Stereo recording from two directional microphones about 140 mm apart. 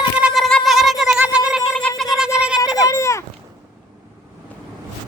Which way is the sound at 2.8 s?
20° left (ahead or behind).